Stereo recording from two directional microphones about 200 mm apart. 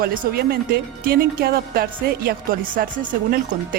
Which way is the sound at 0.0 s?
45° right (ahead or behind).